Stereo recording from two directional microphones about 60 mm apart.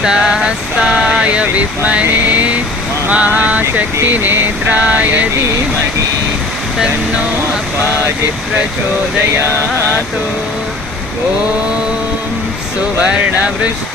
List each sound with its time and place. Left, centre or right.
0.0 s speech: centre
2.0 s a sound: right
13.0 s speech: centre